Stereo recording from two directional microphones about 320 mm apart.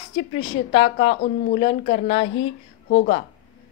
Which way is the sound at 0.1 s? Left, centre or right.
Centre.